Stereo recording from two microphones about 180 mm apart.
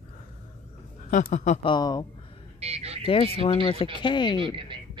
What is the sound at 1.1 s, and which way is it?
Speech, 45° left (ahead or behind).